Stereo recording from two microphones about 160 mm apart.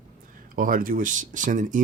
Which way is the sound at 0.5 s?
60° right (ahead or behind).